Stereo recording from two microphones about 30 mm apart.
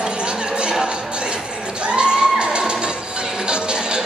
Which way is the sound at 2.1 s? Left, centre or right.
Right.